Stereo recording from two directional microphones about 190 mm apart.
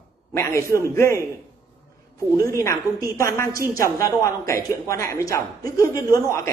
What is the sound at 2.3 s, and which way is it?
Speech, 15° left (ahead or behind).